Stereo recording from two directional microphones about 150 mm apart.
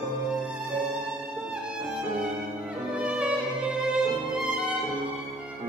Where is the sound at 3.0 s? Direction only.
10° right (ahead or behind).